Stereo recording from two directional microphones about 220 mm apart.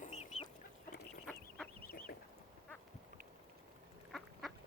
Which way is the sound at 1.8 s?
45° left (ahead or behind).